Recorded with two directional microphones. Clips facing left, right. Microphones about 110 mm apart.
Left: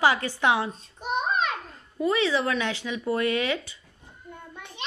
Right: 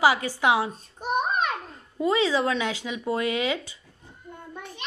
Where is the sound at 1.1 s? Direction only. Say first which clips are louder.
Right 1 dB; 50° right (ahead or behind).